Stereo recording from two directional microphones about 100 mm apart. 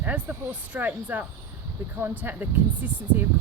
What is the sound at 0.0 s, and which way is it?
Speech, 15° right (ahead or behind).